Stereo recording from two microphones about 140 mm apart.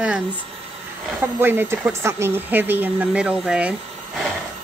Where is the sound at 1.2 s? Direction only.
15° right (ahead or behind).